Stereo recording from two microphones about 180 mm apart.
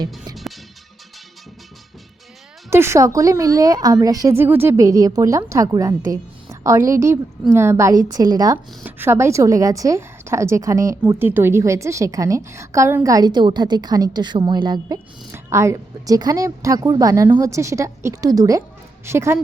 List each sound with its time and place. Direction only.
2.6 s a woman's voice: 15° right (ahead or behind)